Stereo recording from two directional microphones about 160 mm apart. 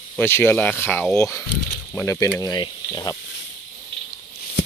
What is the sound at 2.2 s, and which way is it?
Speech, 20° left (ahead or behind).